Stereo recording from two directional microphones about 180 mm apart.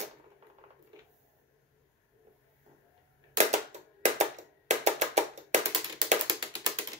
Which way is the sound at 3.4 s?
40° right (ahead or behind).